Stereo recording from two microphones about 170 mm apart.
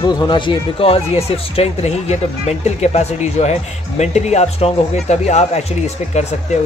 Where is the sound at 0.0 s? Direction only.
25° left (ahead or behind).